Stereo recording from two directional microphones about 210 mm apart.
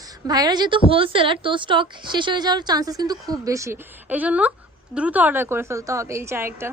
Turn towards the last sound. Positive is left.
turn(degrees=-10)  # may be behind; listen again after turning